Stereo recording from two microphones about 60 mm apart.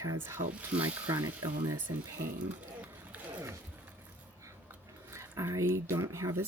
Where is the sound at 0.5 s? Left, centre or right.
Right.